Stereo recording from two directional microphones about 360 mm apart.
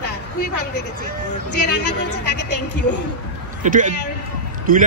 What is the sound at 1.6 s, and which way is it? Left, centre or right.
Speech, left.